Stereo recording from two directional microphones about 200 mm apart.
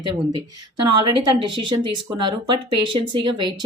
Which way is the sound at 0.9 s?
20° right (ahead or behind).